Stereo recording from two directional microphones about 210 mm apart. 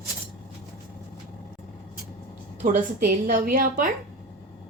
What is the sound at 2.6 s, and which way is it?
A woman's voice, 40° right (ahead or behind).